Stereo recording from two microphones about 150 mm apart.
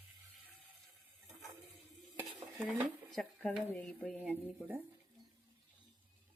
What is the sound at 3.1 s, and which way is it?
Speech, 5° left (ahead or behind).